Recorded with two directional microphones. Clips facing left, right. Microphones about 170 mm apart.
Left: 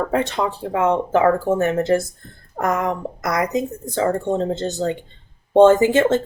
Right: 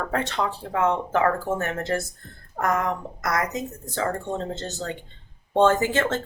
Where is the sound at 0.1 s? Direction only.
15° left (ahead or behind).